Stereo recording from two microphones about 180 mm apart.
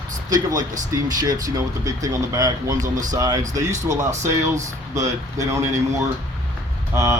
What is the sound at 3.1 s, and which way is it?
Speech, 20° right (ahead or behind).